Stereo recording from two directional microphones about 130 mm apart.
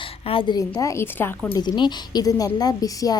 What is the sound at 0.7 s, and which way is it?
Speech, 25° left (ahead or behind).